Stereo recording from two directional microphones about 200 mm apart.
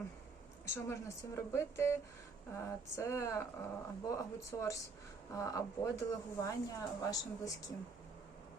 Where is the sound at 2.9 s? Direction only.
15° left (ahead or behind).